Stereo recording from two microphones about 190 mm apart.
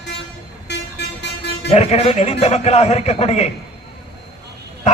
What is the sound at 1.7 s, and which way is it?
A man's voice, 35° left (ahead or behind).